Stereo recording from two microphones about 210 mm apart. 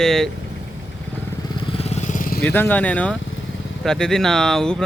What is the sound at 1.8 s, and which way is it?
Vehicle, 30° left (ahead or behind).